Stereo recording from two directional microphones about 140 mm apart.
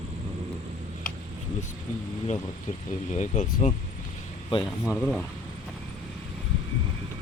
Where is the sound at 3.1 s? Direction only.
55° left (ahead or behind).